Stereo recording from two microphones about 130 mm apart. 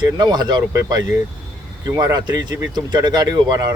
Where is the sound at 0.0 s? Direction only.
35° right (ahead or behind).